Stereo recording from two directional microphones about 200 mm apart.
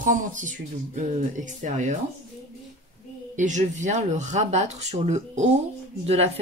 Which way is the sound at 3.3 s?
40° right (ahead or behind).